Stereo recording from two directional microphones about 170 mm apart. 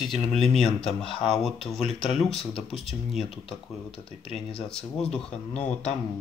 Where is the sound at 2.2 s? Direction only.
35° left (ahead or behind).